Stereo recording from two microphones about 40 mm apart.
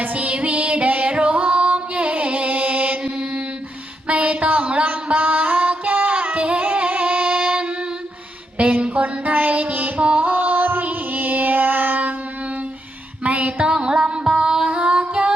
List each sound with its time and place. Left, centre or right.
0.0 s music: right
3.0 s mantra: right
4.0 s a sound: right
5.0 s music: right
13.2 s music: right
13.7 s music: right